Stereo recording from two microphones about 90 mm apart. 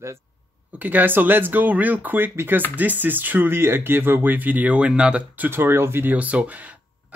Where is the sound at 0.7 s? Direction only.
20° right (ahead or behind).